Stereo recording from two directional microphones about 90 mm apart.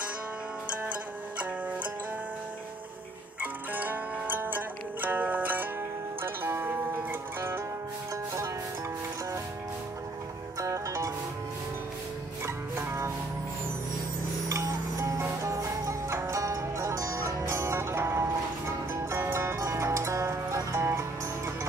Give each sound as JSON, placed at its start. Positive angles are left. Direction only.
{"t": 3.3, "sound": "zither", "side_deg": -20}
{"t": 10.6, "sound": "music", "side_deg": -35}
{"t": 12.4, "sound": "music", "side_deg": -30}
{"t": 14.5, "sound": "music", "side_deg": -35}